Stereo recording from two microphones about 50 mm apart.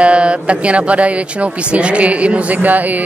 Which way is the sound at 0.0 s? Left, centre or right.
Right.